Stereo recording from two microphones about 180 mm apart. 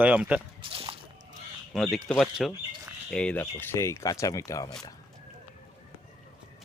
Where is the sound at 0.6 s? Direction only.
30° right (ahead or behind).